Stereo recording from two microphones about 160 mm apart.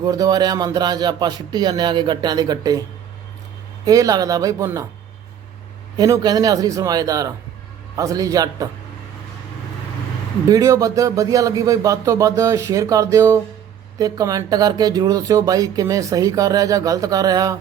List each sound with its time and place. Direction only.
0.0 s speech: 25° right (ahead or behind)
3.8 s speech: 20° right (ahead or behind)
6.0 s speech: 25° right (ahead or behind)
10.5 s speech: 20° right (ahead or behind)